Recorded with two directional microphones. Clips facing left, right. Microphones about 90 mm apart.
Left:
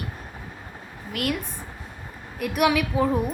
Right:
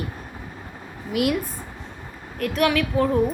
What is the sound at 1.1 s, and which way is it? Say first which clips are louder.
Speech: right 5 dB; 10° right (ahead or behind).